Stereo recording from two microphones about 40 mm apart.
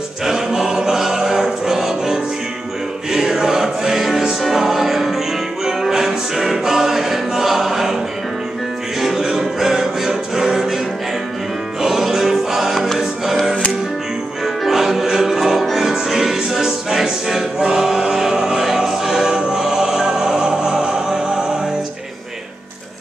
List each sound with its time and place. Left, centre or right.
0.2 s choir: centre
3.1 s music: centre
9.0 s music: centre
11.8 s music: centre
14.4 s music: centre
17.6 s choir: centre
19.6 s music: centre